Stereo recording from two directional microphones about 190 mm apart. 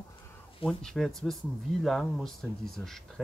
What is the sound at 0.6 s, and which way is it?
Speech, 5° left (ahead or behind).